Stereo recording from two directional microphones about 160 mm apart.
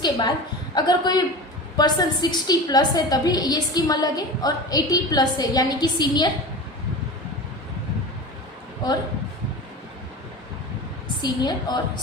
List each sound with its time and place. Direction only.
0.0 s a woman's voice: 25° left (ahead or behind)
11.2 s a woman's voice: 25° left (ahead or behind)